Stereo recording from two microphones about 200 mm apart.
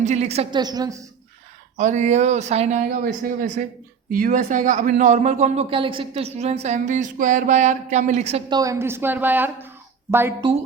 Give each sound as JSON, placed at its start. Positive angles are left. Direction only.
{"t": 0.0, "sound": "speech", "side_deg": -35}
{"t": 0.6, "sound": "a woman's voice", "side_deg": -20}
{"t": 1.7, "sound": "speech", "side_deg": -35}